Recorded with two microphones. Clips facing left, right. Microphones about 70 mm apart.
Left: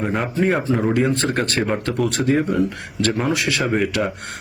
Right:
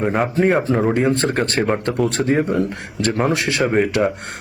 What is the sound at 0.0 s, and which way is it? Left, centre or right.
Speech, centre.